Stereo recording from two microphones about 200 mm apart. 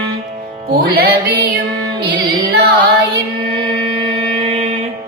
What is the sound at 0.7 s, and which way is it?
Music, 50° right (ahead or behind).